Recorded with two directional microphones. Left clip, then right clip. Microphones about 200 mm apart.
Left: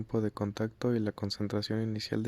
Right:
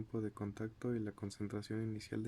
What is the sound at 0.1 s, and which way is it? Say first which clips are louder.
Speech: left 12 dB; 40° left (ahead or behind).